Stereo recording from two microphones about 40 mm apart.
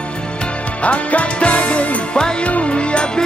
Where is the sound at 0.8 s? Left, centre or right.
Left.